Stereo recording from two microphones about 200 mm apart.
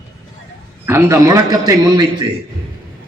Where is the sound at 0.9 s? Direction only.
15° right (ahead or behind).